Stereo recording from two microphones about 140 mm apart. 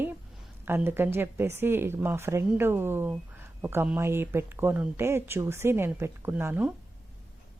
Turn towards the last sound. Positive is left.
turn(degrees=-15)  # may be behind; listen again after turning